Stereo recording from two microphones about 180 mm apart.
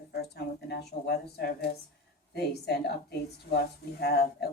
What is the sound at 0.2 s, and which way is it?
Speech, 65° left (ahead or behind).